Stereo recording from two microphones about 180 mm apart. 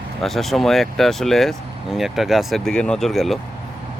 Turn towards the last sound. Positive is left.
turn(degrees=0)  # may be behind; listen again after turning